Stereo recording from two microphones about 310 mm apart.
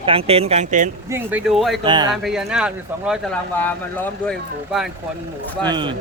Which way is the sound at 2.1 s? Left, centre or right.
Centre.